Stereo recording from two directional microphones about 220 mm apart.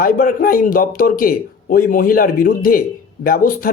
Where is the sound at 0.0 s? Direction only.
40° left (ahead or behind).